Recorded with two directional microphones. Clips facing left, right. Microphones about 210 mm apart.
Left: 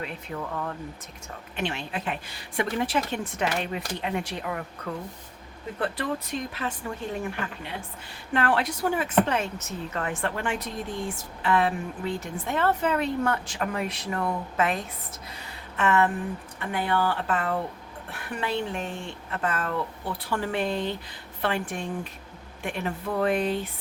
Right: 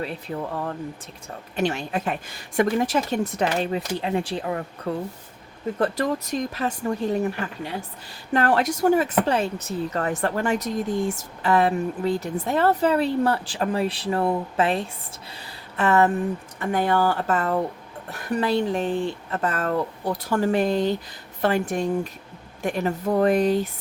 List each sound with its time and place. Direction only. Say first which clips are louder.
0.0 s speech: right 5 dB; 35° right (ahead or behind)
5.8 s speech: right 5 dB; 40° right (ahead or behind)